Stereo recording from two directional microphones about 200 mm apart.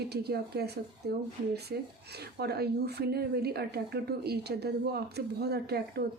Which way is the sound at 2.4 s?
55° right (ahead or behind).